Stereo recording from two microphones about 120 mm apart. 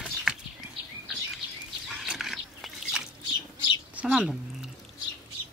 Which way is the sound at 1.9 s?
5° right (ahead or behind).